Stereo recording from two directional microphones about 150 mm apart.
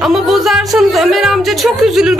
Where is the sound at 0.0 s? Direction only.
Centre (ahead or behind).